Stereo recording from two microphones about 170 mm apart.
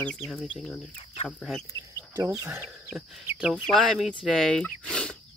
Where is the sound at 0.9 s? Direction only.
35° left (ahead or behind).